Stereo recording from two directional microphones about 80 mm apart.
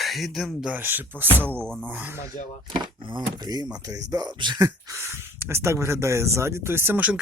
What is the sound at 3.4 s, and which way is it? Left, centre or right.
Speech, right.